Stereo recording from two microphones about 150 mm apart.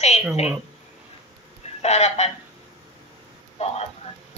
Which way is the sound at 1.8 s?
45° left (ahead or behind).